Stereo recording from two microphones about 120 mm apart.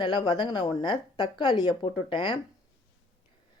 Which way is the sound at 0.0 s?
40° left (ahead or behind).